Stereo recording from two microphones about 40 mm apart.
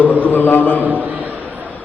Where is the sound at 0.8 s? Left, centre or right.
Right.